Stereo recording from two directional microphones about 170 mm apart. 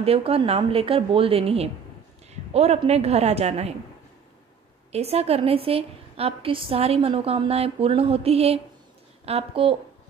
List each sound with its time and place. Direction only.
0.0 s a woman's voice: 35° right (ahead or behind)
4.9 s a woman's voice: 35° right (ahead or behind)